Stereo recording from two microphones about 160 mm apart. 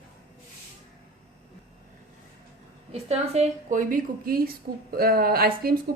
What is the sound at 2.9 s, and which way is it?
Speech, 40° right (ahead or behind).